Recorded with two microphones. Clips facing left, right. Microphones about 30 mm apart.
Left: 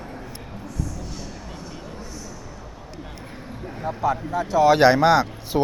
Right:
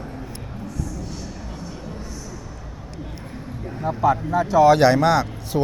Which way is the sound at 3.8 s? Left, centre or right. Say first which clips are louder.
Right 4 dB; centre.